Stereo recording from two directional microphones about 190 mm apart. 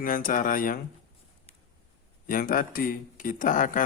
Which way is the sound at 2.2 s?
50° left (ahead or behind).